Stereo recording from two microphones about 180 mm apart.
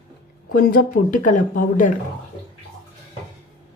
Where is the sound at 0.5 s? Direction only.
55° left (ahead or behind).